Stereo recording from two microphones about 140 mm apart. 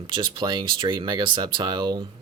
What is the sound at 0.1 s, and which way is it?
Speech, 35° right (ahead or behind).